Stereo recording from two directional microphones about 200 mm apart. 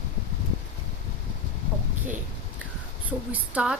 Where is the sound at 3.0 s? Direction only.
5° right (ahead or behind).